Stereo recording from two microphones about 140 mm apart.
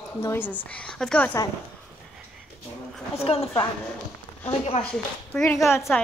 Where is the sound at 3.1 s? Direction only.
45° left (ahead or behind).